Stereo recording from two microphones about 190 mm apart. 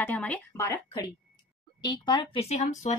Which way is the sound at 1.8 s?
25° left (ahead or behind).